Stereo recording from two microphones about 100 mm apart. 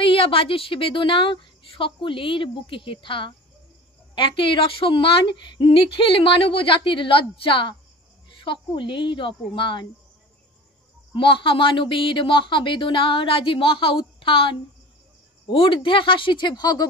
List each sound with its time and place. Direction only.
0.0 s a woman's voice: 65° left (ahead or behind)
11.1 s a woman's voice: 60° left (ahead or behind)